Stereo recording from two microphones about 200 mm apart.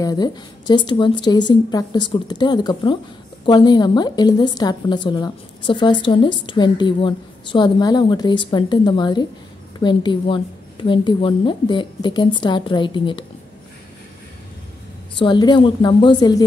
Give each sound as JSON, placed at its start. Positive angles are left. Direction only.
{"t": 0.0, "sound": "a woman's voice", "side_deg": 20}
{"t": 15.1, "sound": "a woman's voice", "side_deg": 20}